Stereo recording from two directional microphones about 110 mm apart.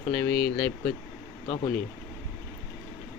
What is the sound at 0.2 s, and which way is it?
Speech, 15° left (ahead or behind).